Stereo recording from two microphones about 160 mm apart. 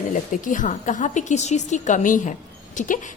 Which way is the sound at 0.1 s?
55° left (ahead or behind).